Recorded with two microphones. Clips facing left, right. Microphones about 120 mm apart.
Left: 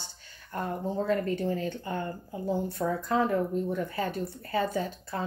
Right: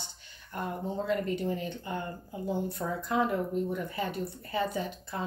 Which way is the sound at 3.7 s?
40° left (ahead or behind).